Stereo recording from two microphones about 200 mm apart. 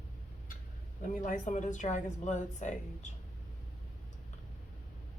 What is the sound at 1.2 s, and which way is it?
A woman's voice, 40° left (ahead or behind).